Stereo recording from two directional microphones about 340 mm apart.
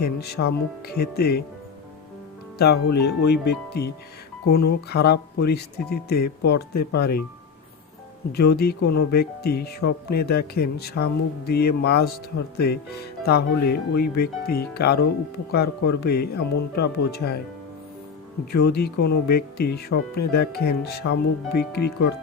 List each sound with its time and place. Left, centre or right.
0.0 s speech: left
2.6 s speech: left
8.3 s speech: left
18.5 s speech: left